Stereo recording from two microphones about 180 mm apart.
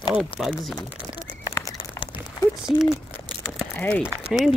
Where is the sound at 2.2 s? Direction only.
5° right (ahead or behind).